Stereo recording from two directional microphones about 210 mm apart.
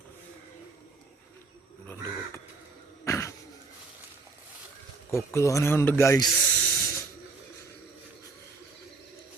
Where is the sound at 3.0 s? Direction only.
15° left (ahead or behind).